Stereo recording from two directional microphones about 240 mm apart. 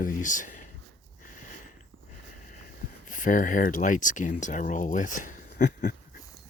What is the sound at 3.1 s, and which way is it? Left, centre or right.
Speech, left.